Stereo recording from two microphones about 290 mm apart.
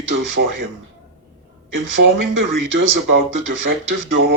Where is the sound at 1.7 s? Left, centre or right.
Right.